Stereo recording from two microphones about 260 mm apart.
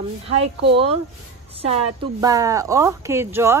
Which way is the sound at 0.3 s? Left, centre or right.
Right.